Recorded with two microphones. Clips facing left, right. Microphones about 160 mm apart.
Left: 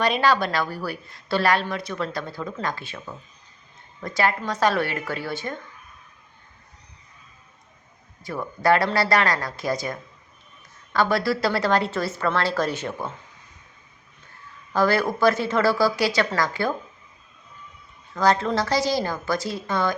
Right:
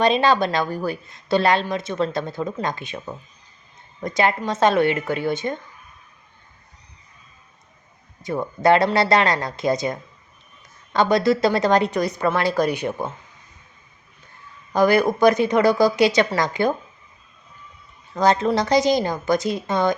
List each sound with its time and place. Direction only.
0.0 s speech: 20° right (ahead or behind)
8.2 s a woman's voice: 20° right (ahead or behind)
14.7 s a woman's voice: 15° right (ahead or behind)
18.1 s speech: 20° right (ahead or behind)